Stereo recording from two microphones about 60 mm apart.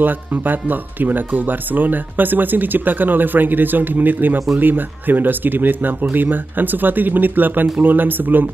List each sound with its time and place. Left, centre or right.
0.0 s speech: right